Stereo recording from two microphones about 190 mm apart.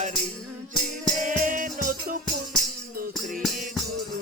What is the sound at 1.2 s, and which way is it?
Music, 45° right (ahead or behind).